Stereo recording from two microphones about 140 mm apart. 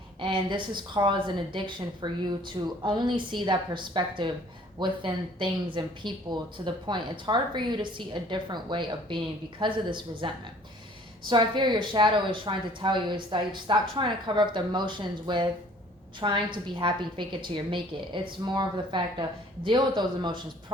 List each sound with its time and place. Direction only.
0.2 s speech: 35° right (ahead or behind)